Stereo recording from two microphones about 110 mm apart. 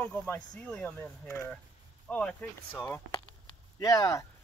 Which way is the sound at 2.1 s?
10° left (ahead or behind).